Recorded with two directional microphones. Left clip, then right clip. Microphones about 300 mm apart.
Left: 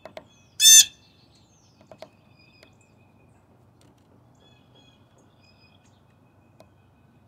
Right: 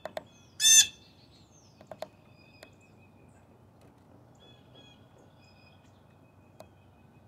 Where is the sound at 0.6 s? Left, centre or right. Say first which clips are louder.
Left 7 dB; left.